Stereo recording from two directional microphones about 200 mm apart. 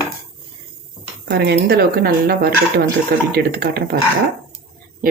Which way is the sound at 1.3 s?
55° right (ahead or behind).